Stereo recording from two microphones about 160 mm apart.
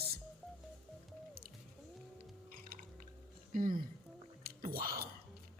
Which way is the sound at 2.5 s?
60° right (ahead or behind).